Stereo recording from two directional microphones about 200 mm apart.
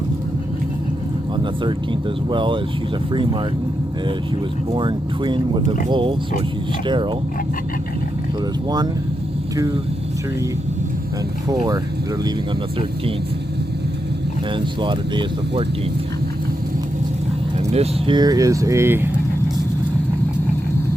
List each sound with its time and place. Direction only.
1.6 s speech: 25° right (ahead or behind)
4.7 s speech: 25° right (ahead or behind)
11.4 s speech: 20° right (ahead or behind)
14.5 s speech: 25° right (ahead or behind)
17.6 s speech: 30° right (ahead or behind); by 19.0 s 10° right (ahead or behind)